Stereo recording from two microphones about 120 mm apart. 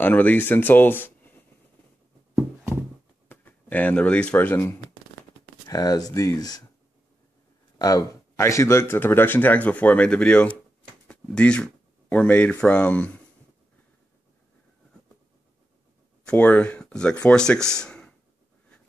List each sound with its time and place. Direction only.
0.0 s speech: 15° left (ahead or behind)
3.3 s speech: 15° left (ahead or behind)
5.7 s speech: 30° left (ahead or behind)
7.8 s speech: 30° left (ahead or behind); by 13.2 s 15° left (ahead or behind)
16.3 s speech: 10° left (ahead or behind)